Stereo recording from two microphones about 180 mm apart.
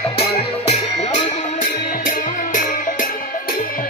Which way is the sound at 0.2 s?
35° left (ahead or behind).